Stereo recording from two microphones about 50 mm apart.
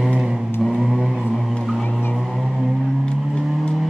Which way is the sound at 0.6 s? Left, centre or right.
Centre.